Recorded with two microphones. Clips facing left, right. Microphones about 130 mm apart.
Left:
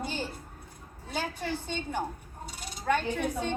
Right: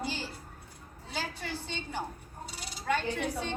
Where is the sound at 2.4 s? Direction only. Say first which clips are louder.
Left 4 dB; 50° left (ahead or behind).